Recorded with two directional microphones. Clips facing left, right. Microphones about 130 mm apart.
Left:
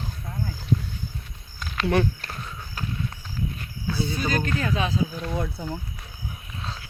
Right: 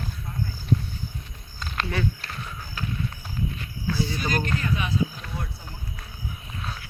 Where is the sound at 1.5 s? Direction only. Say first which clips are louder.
Left 3 dB; centre (ahead or behind).